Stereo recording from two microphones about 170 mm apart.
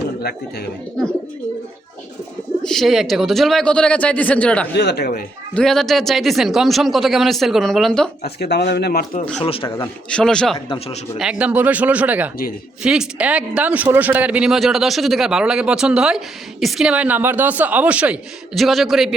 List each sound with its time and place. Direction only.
0.2 s speech: 65° left (ahead or behind)
2.6 s speech: centre (ahead or behind)
4.8 s speech: 75° left (ahead or behind)
5.5 s speech: centre (ahead or behind)
8.2 s speech: 75° left (ahead or behind)
9.4 s speech: 30° left (ahead or behind)
9.6 s speech: 15° left (ahead or behind)
10.7 s speech: 35° left (ahead or behind)
11.2 s speech: 5° right (ahead or behind)